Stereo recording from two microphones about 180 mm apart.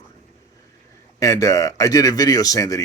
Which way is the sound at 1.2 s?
20° left (ahead or behind).